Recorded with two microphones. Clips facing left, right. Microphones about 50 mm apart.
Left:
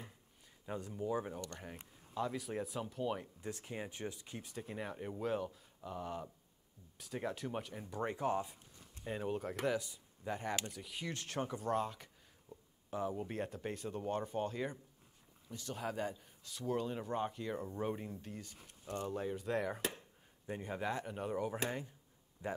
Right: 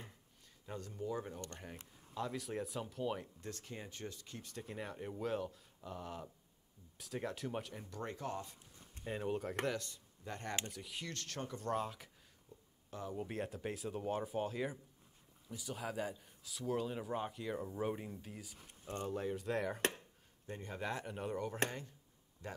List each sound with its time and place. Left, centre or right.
0.7 s speech: centre
1.6 s a man's voice: centre
3.4 s a man's voice: centre
7.9 s speech: centre
9.0 s a man's voice: centre
11.1 s speech: centre
11.6 s a man's voice: centre
13.1 s a man's voice: centre
20.4 s speech: centre
20.9 s a man's voice: centre